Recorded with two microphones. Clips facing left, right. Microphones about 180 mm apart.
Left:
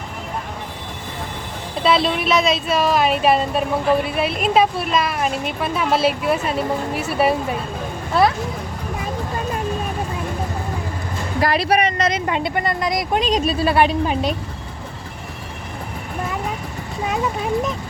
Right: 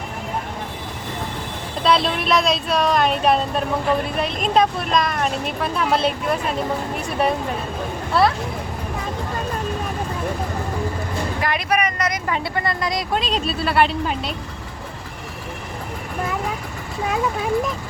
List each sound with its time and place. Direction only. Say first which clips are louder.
1.8 s speech: left 1 dB; centre (ahead or behind)
11.3 s a woman's voice: left 6 dB; 35° left (ahead or behind); by 14.2 s 15° left (ahead or behind)